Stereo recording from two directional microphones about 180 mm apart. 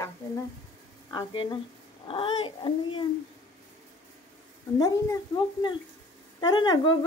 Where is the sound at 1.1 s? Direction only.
25° left (ahead or behind).